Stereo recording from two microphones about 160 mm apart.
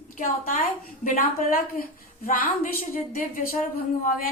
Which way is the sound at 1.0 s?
60° left (ahead or behind).